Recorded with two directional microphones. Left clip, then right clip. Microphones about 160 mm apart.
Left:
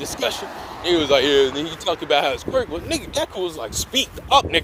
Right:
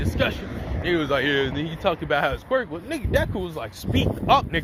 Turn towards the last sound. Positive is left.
turn(degrees=45)  # may be behind; listen again after turning